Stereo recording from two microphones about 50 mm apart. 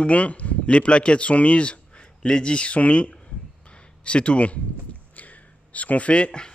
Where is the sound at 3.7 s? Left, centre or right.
Left.